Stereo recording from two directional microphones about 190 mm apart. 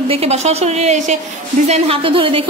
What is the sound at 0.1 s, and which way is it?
A woman's voice, 35° right (ahead or behind).